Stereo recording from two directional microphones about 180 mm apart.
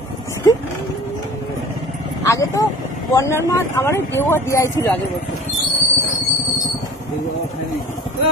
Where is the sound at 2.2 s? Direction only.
20° left (ahead or behind).